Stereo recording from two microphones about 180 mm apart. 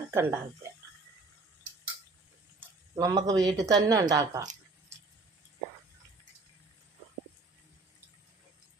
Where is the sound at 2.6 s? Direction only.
20° right (ahead or behind).